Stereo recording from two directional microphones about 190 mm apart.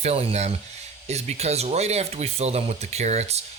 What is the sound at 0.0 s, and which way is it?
Speech, 30° right (ahead or behind).